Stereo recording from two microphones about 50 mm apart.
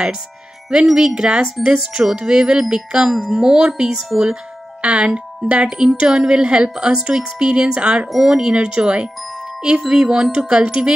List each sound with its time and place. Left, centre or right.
0.8 s a woman's voice: centre
8.1 s a woman's voice: centre